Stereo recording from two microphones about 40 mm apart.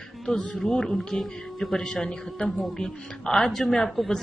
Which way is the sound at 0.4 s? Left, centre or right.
Centre.